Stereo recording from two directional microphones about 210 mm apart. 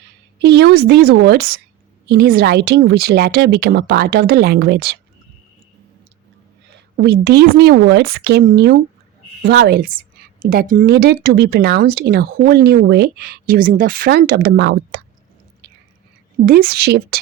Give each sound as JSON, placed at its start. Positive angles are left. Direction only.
{"t": 0.3, "sound": "speech", "side_deg": -55}
{"t": 6.9, "sound": "speech", "side_deg": -50}
{"t": 16.5, "sound": "speech", "side_deg": -45}